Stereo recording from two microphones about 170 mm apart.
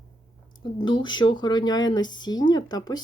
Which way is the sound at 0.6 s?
25° left (ahead or behind).